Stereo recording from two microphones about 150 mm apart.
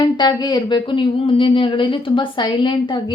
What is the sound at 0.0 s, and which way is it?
Speech, 30° left (ahead or behind).